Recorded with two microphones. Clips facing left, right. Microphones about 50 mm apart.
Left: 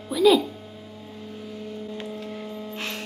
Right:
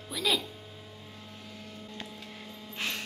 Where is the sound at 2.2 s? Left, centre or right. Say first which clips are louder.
Left 11 dB; centre.